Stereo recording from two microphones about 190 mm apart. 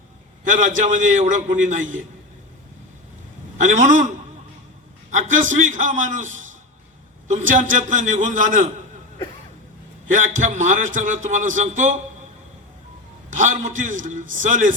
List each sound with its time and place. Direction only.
0.4 s a man's voice: 40° right (ahead or behind)
3.6 s a man's voice: 40° right (ahead or behind)
5.1 s a man's voice: 40° right (ahead or behind)
10.1 s a man's voice: 40° right (ahead or behind)
13.3 s a man's voice: 40° right (ahead or behind)